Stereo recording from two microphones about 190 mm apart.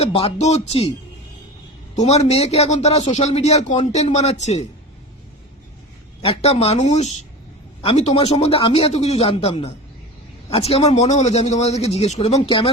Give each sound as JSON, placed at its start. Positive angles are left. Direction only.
{"t": 0.0, "sound": "a man's voice", "side_deg": 30}
{"t": 2.0, "sound": "a man's voice", "side_deg": 35}
{"t": 6.2, "sound": "a man's voice", "side_deg": 30}